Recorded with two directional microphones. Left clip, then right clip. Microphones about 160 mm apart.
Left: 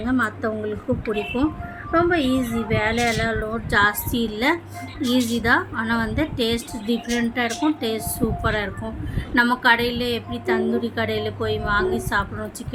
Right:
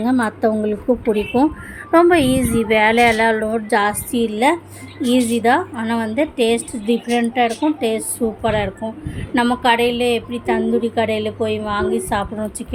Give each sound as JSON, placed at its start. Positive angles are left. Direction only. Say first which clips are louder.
{"t": 0.0, "sound": "a woman's voice", "louder": "right 5 dB", "side_deg": -30}
{"t": 1.9, "sound": "a woman's voice", "louder": "right 7 dB", "side_deg": -30}